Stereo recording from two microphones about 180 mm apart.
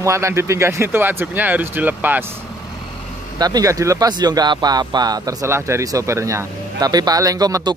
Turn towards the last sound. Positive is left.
turn(degrees=-20)  # may be behind; listen again after turning